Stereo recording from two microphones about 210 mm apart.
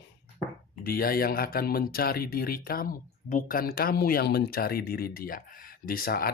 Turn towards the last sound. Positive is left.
turn(degrees=45)  # may be behind; listen again after turning